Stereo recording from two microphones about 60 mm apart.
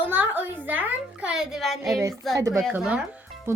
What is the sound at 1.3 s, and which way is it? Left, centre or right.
Speech, centre.